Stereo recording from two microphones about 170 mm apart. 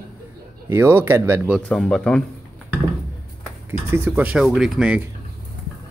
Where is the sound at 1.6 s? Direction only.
5° left (ahead or behind).